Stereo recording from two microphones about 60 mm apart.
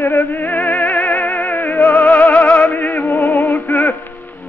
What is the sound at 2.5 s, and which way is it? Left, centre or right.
Music, left.